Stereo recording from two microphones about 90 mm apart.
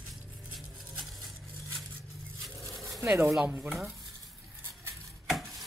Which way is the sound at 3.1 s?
25° right (ahead or behind).